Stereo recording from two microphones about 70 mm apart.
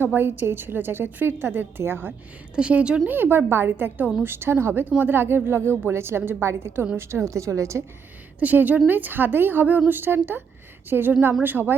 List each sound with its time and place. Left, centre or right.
0.0 s a woman's voice: right
2.6 s a woman's voice: centre
3.1 s a woman's voice: right
8.4 s a woman's voice: right